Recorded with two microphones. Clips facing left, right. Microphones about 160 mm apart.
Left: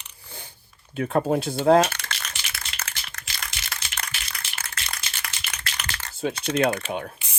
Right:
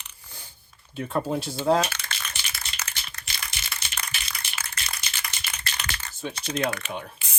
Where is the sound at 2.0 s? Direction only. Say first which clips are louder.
Left 1 dB; 85° left.